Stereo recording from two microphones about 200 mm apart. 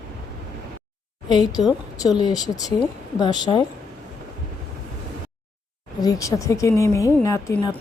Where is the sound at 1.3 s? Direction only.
20° left (ahead or behind).